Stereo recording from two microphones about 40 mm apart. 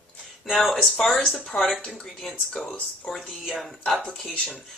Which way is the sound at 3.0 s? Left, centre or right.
Centre.